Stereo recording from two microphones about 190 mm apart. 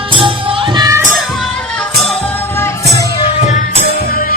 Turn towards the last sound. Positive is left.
turn(degrees=35)  # may be behind; listen again after turning